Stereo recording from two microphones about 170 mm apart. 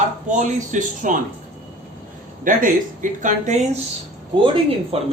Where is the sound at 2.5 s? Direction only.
50° right (ahead or behind).